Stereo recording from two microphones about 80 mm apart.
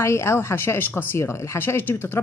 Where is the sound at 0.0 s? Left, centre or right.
Left.